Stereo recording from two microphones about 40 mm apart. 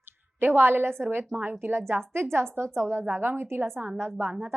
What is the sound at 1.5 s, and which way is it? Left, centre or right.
A woman's voice, right.